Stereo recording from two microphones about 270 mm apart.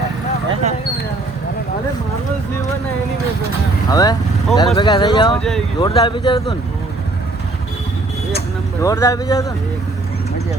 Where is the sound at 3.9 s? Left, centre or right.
Centre.